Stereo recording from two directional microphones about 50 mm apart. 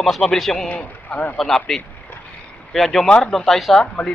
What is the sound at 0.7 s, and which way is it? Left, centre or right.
Speech, left.